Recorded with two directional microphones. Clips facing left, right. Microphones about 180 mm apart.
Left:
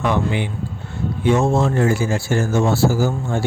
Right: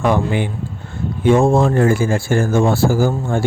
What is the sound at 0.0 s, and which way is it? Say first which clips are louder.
Speech: right 3 dB; 50° right (ahead or behind).